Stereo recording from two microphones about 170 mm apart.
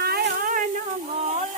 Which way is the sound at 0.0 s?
65° right (ahead or behind).